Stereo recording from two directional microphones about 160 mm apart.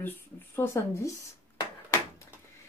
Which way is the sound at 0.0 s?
15° left (ahead or behind).